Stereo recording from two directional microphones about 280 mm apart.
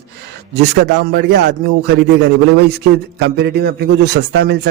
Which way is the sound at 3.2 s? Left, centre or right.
Right.